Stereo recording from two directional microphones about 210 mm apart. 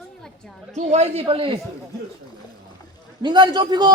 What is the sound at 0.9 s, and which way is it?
Speech, 30° right (ahead or behind).